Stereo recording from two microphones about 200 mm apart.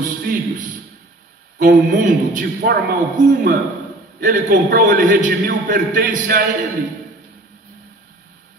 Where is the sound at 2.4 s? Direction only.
55° right (ahead or behind).